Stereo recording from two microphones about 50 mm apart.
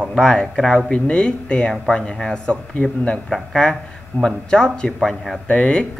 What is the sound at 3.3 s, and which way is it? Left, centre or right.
Speech, centre.